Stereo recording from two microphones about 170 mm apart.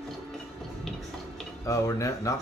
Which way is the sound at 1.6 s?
20° left (ahead or behind).